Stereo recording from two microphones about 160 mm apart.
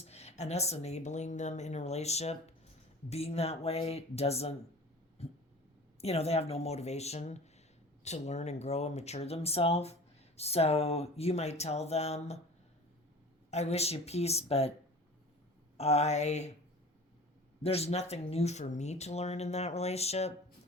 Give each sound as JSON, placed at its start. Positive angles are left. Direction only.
{"t": 0.0, "sound": "speech", "side_deg": 40}
{"t": 13.5, "sound": "speech", "side_deg": 40}
{"t": 15.8, "sound": "speech", "side_deg": 40}
{"t": 17.6, "sound": "speech", "side_deg": 40}